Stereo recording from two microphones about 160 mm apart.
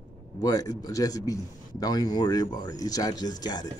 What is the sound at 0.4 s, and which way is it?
A man's voice, 20° left (ahead or behind).